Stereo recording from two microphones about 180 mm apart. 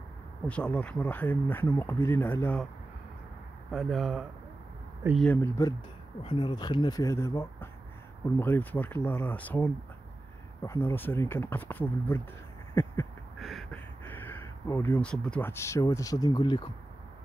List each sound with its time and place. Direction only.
0.5 s speech: 5° left (ahead or behind)
3.7 s speech: centre (ahead or behind)
6.2 s speech: 25° left (ahead or behind)
12.8 s a sound: 10° left (ahead or behind)
13.4 s a sound: centre (ahead or behind)
14.0 s speech: 10° left (ahead or behind)